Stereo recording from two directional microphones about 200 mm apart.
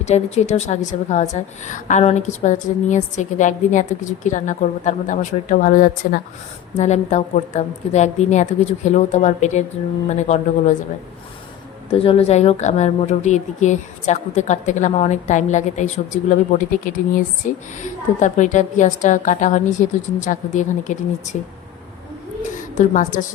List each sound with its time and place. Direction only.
0.0 s a woman's voice: 35° left (ahead or behind)
6.7 s a woman's voice: 35° left (ahead or behind)
11.9 s a woman's voice: 30° left (ahead or behind)
22.8 s a woman's voice: 40° left (ahead or behind)